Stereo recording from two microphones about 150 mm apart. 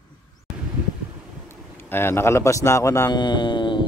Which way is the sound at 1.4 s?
15° left (ahead or behind).